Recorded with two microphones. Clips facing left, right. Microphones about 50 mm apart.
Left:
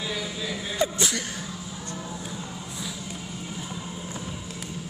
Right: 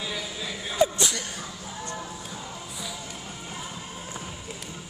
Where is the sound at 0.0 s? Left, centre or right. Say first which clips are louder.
Left 2 dB; centre.